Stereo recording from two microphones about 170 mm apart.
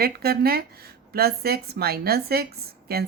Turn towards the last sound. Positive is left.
turn(degrees=-65)  # may be behind; listen again after turning